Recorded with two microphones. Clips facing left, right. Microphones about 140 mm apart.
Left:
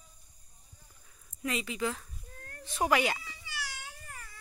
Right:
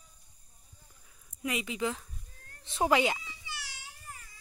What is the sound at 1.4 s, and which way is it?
Speech, 15° right (ahead or behind).